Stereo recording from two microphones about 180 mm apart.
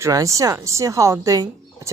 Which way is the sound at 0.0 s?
20° right (ahead or behind).